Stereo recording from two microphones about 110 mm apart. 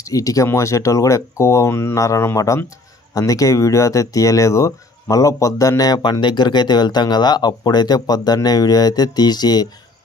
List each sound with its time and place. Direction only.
0.0 s speech: 30° left (ahead or behind)